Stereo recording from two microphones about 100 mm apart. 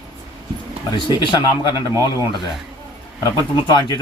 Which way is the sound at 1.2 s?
50° left (ahead or behind).